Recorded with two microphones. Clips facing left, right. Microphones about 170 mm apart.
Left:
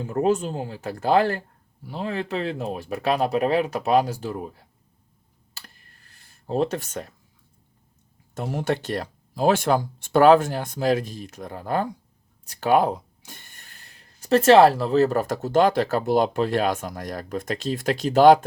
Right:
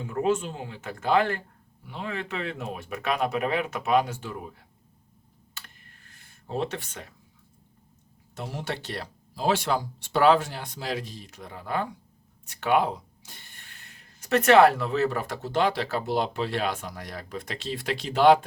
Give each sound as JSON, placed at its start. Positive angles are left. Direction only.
{"t": 0.0, "sound": "speech", "side_deg": 40}
{"t": 5.5, "sound": "a sound", "side_deg": 35}
{"t": 6.5, "sound": "speech", "side_deg": 40}
{"t": 8.4, "sound": "speech", "side_deg": 50}
{"t": 12.5, "sound": "a sound", "side_deg": 40}
{"t": 14.2, "sound": "speech", "side_deg": 30}